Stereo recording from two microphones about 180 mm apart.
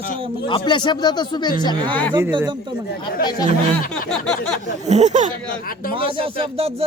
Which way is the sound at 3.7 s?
5° left (ahead or behind).